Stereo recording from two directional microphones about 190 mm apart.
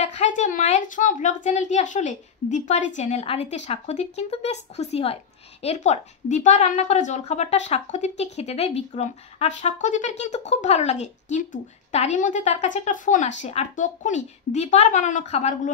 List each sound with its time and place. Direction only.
0.0 s a child's voice: 40° left (ahead or behind)